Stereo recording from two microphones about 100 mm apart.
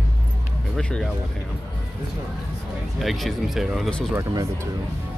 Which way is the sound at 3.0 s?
Centre (ahead or behind).